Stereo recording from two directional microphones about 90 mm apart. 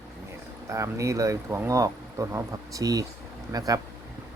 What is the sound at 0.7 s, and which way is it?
Speech, 35° right (ahead or behind).